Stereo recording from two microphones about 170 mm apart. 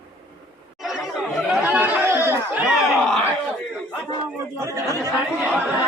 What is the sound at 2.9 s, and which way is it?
Crowd, 5° left (ahead or behind).